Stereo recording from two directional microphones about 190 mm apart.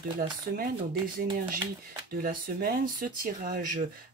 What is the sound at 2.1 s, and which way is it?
Speech, 50° right (ahead or behind).